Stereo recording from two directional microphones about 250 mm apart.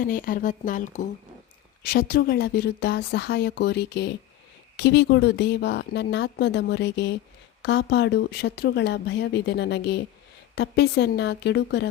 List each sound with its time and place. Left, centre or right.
0.0 s speech: left